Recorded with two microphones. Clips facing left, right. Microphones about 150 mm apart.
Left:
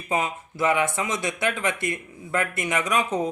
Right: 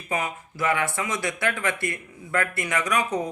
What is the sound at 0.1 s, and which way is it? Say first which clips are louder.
Speech: left 2 dB; 25° left (ahead or behind).